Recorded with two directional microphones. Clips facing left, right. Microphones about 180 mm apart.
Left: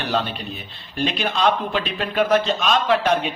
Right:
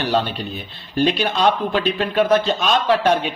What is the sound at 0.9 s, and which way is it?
A man's voice, 35° right (ahead or behind).